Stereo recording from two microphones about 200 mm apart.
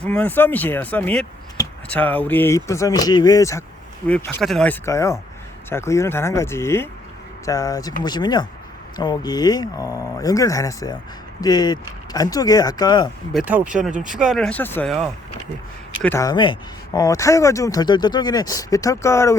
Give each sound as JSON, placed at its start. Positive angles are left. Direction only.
{"t": 0.0, "sound": "speech", "side_deg": 5}
{"t": 13.3, "sound": "speech", "side_deg": -10}
{"t": 16.0, "sound": "speech", "side_deg": 15}